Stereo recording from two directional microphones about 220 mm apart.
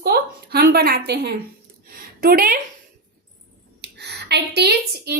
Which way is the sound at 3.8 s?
50° right (ahead or behind).